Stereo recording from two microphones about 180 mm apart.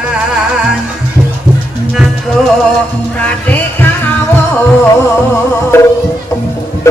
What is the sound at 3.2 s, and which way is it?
Music, 10° left (ahead or behind).